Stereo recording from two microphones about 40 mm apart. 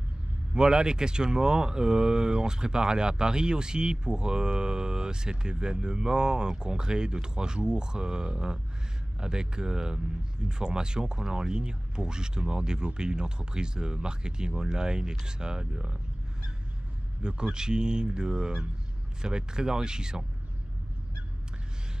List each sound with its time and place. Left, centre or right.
0.6 s speech: centre
17.2 s speech: centre